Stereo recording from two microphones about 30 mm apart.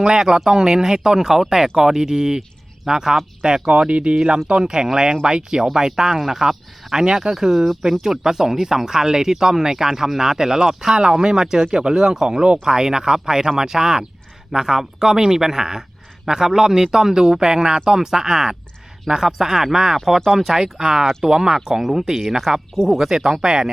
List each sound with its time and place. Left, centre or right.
0.0 s speech: right
3.7 s speech: right
7.3 s a man's voice: centre
21.6 s speech: centre